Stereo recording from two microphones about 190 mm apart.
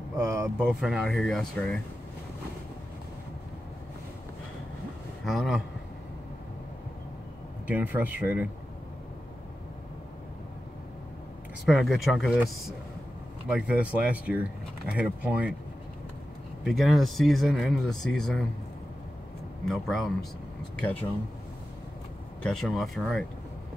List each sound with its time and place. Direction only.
0.2 s a sound: 15° right (ahead or behind)
0.7 s speech: centre (ahead or behind)
5.2 s speech: centre (ahead or behind)
7.6 s speech: 10° right (ahead or behind)
11.6 s speech: centre (ahead or behind)
16.6 s speech: centre (ahead or behind)
19.6 s speech: centre (ahead or behind)
22.4 s speech: centre (ahead or behind)